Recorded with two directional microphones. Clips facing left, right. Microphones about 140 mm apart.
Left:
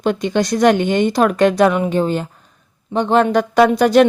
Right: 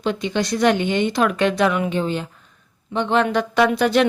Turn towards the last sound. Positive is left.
turn(degrees=40)  # may be behind; listen again after turning